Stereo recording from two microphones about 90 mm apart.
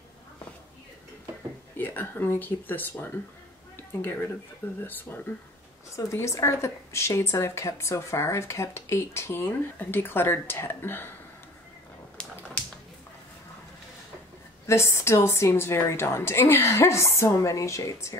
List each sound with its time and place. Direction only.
1.8 s speech: 20° left (ahead or behind)
5.9 s speech: 35° left (ahead or behind)
12.2 s typewriter: 10° left (ahead or behind)
14.7 s speech: 30° left (ahead or behind)